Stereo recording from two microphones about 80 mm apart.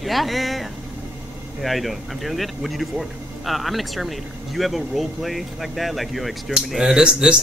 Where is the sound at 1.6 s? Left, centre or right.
Centre.